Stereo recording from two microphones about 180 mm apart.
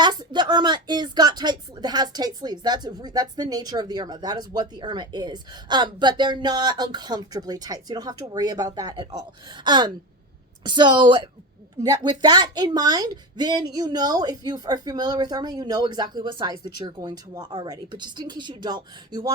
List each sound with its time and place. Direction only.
0.0 s speech: 25° right (ahead or behind)